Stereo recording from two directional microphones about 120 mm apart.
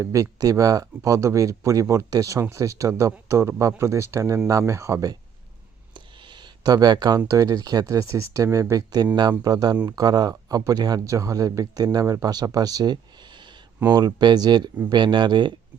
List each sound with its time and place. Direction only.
0.0 s speech: 25° right (ahead or behind)
5.9 s a sound: 40° right (ahead or behind)
7.3 s speech: 25° right (ahead or behind)